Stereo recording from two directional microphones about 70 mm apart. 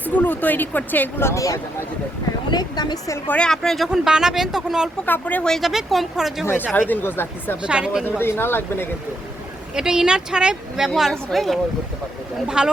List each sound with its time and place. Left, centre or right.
0.0 s speech: left
1.3 s speech: left
2.5 s speech: left
3.4 s speech: centre
3.8 s speech: centre
5.0 s speech: left
5.4 s speech: centre
6.7 s speech: left
7.6 s speech: centre
8.2 s speech: left
9.7 s speech: centre
12.5 s speech: centre